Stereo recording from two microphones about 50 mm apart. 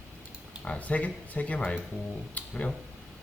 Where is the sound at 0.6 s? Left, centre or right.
Left.